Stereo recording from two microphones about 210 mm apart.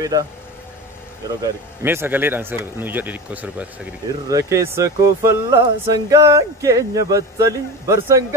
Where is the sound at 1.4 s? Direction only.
10° right (ahead or behind).